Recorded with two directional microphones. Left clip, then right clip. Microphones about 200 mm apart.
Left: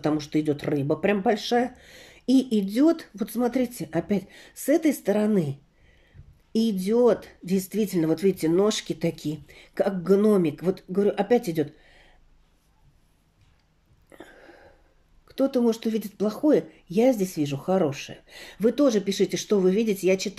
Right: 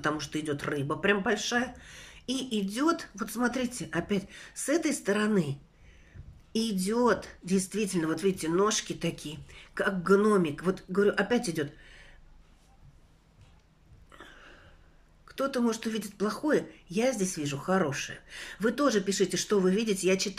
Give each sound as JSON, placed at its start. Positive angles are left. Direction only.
{"t": 0.0, "sound": "speech", "side_deg": 20}
{"t": 14.1, "sound": "a sound", "side_deg": 25}
{"t": 15.2, "sound": "speech", "side_deg": 20}